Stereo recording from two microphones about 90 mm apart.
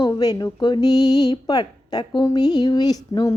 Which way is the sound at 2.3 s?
50° left (ahead or behind).